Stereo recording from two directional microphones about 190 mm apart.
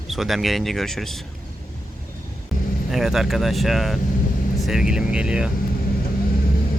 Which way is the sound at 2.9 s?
Centre (ahead or behind).